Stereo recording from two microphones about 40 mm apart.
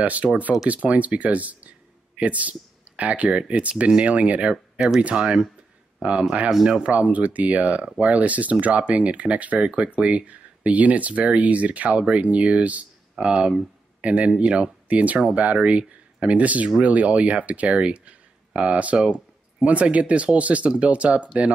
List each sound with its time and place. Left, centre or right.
0.0 s speech: right
13.2 s speech: right
14.0 s speech: right